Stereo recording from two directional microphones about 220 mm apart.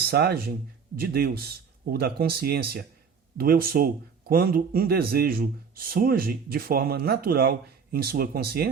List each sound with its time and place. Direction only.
0.0 s speech: 45° right (ahead or behind)